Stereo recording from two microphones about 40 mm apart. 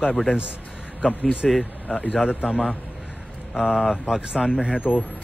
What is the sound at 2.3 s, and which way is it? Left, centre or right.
Speech, right.